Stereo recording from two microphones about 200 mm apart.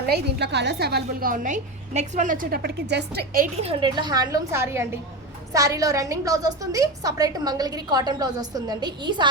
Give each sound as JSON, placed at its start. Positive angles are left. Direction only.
{"t": 0.0, "sound": "a woman's voice", "side_deg": -55}
{"t": 3.6, "sound": "a woman's voice", "side_deg": -30}